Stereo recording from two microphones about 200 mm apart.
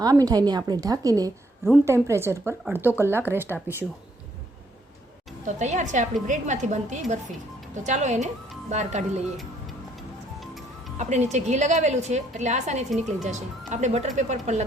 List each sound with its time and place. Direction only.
0.0 s a woman's voice: 20° right (ahead or behind)
5.5 s a woman's voice: 35° right (ahead or behind)
10.4 s music: centre (ahead or behind)
10.9 s a woman's voice: 35° right (ahead or behind)